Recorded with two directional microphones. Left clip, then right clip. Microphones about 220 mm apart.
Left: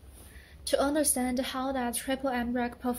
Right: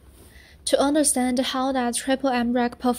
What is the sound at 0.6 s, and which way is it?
A woman's voice, 35° right (ahead or behind).